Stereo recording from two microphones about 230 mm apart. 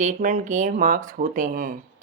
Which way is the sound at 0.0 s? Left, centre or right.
Right.